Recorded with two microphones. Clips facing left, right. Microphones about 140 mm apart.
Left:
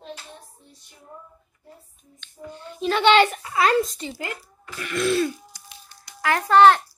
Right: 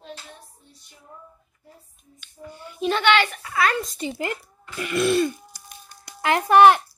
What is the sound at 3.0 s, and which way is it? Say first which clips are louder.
Speech: left 6 dB; 35° left (ahead or behind).